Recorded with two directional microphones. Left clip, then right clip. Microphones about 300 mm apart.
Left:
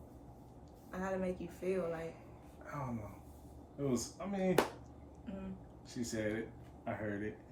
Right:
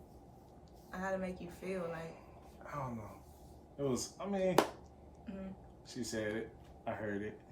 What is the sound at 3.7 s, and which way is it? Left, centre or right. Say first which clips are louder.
Speech: right 1 dB; centre.